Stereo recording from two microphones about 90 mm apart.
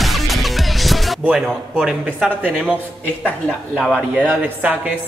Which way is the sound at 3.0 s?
15° left (ahead or behind).